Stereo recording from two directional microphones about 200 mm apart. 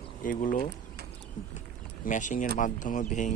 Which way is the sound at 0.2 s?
40° left (ahead or behind).